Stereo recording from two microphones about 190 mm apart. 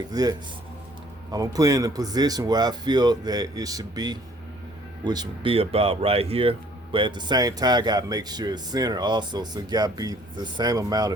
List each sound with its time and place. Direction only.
0.1 s speech: 20° right (ahead or behind)